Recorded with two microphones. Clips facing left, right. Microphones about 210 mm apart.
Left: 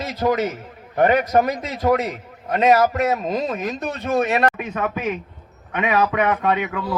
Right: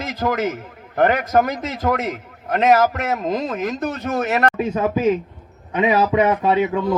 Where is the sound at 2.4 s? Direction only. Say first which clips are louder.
Right 1 dB; 50° right (ahead or behind).